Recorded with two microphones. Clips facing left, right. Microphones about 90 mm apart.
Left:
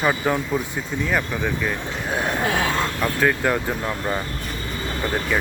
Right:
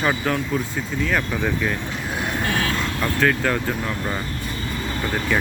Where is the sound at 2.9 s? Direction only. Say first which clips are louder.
Right 3 dB; 10° left (ahead or behind).